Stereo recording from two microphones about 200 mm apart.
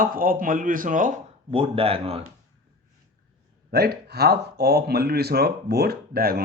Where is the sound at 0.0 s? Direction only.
45° right (ahead or behind).